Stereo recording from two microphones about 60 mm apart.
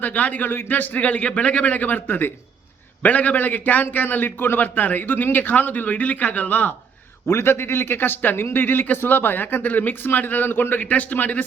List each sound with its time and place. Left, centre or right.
0.0 s a man's voice: left
7.3 s speech: left